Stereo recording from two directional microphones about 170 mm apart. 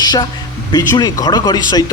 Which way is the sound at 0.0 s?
25° left (ahead or behind).